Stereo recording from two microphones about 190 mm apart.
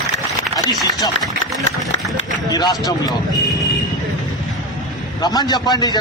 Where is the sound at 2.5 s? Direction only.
20° left (ahead or behind).